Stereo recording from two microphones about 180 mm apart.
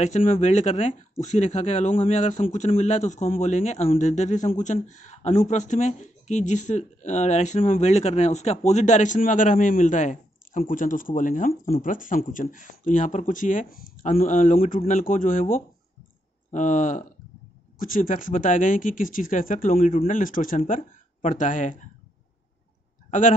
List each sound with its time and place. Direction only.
0.0 s speech: 40° left (ahead or behind)